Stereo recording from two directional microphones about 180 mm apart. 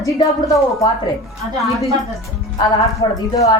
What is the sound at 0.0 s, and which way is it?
Speech, 15° left (ahead or behind).